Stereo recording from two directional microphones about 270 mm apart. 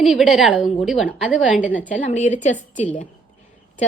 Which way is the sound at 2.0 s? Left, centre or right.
Left.